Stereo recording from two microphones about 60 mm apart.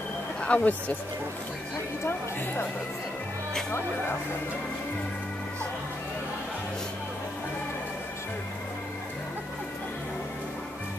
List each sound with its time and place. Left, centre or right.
0.4 s speech: left